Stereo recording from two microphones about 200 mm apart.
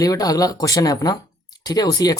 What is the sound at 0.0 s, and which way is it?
Speech, 20° left (ahead or behind).